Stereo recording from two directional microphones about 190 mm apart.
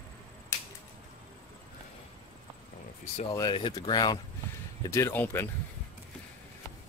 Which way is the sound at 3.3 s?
25° left (ahead or behind).